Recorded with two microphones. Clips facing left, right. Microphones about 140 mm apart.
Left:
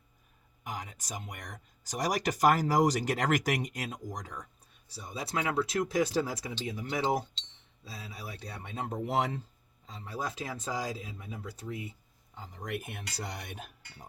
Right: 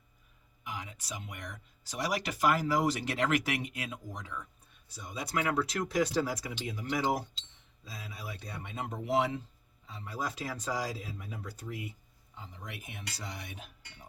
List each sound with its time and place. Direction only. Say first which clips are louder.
0.6 s speech: left 2 dB; 45° left (ahead or behind); by 11.9 s 25° left (ahead or behind)
12.4 s speech: left 8 dB; 45° left (ahead or behind)